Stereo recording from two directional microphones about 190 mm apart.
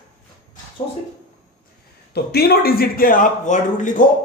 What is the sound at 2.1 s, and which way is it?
Speech, 55° left (ahead or behind).